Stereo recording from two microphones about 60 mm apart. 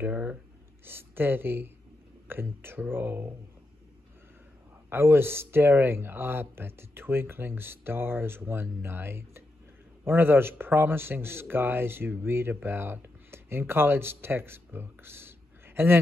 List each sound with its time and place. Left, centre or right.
0.0 s speech: right
0.8 s speech: right
4.8 s speech: right